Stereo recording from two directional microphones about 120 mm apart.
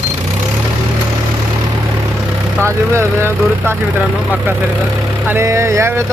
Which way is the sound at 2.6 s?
20° right (ahead or behind).